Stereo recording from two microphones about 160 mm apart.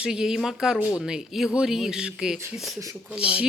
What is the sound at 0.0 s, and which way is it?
Speech, 5° right (ahead or behind).